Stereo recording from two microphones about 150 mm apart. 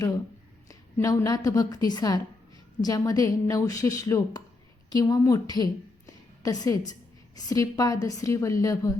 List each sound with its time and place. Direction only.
0.7 s a woman's voice: 20° left (ahead or behind)
6.1 s a sound: 25° left (ahead or behind)
7.3 s a woman's voice: 25° left (ahead or behind)